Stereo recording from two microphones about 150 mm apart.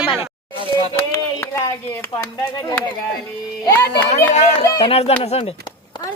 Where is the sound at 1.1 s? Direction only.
20° left (ahead or behind).